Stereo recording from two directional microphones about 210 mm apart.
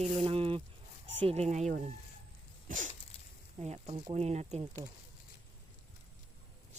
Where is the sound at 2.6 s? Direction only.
40° right (ahead or behind).